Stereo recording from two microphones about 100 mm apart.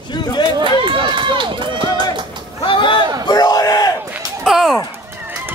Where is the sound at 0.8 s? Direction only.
55° right (ahead or behind).